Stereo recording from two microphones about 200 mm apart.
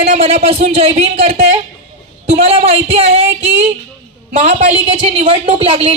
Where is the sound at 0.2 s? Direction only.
30° right (ahead or behind).